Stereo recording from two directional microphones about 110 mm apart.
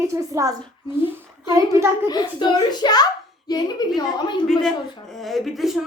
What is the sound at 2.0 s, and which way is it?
A child's voice, 40° left (ahead or behind).